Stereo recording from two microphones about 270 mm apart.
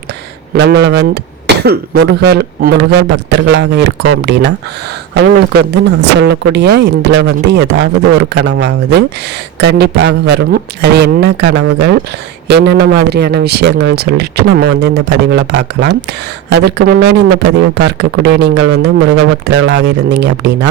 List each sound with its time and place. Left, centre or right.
0.5 s speech: right
6.1 s speech: right